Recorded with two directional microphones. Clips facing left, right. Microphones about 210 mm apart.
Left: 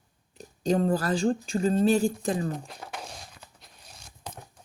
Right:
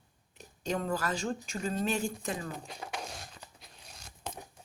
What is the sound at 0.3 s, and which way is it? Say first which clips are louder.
Speech: left 9 dB; 35° left (ahead or behind).